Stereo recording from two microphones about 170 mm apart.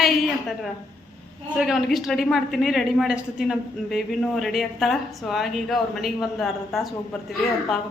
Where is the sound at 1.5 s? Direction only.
Centre (ahead or behind).